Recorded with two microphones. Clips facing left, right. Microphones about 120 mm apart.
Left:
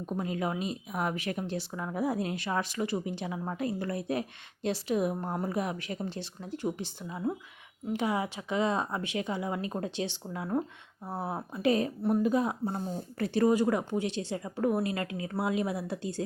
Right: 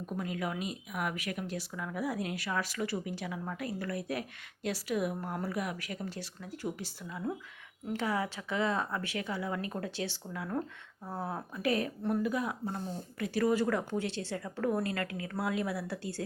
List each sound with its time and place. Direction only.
0.0 s a woman's voice: 25° left (ahead or behind)